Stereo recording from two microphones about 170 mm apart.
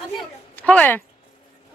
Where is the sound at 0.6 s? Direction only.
10° left (ahead or behind).